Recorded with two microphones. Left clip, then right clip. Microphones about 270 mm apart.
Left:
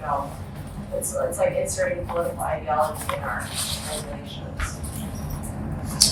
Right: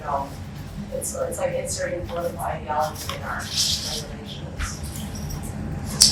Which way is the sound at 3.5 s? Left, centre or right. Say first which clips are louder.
Right 7 dB; centre.